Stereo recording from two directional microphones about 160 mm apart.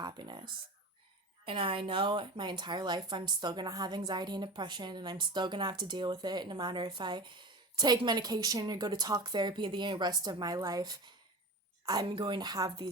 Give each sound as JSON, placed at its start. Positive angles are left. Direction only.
{"t": 0.0, "sound": "a woman's voice", "side_deg": -25}